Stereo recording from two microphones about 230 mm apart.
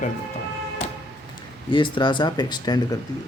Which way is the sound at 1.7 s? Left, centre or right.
Centre.